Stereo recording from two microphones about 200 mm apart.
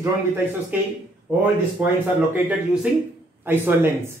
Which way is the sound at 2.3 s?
10° right (ahead or behind).